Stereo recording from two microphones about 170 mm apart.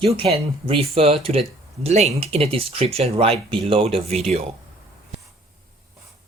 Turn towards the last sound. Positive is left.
turn(degrees=-35)  # may be behind; listen again after turning